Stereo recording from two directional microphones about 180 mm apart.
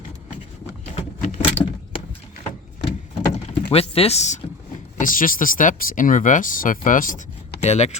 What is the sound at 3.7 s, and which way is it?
Speech, 35° left (ahead or behind).